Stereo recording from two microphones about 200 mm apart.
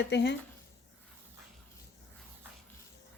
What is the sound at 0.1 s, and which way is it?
Speech, 55° left (ahead or behind).